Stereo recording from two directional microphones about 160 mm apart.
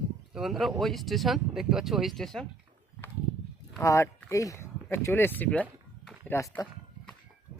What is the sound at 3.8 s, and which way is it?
Speech, 20° left (ahead or behind).